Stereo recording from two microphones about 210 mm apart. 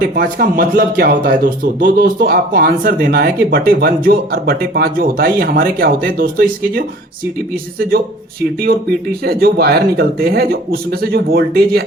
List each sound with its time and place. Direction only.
0.0 s speech: 45° right (ahead or behind)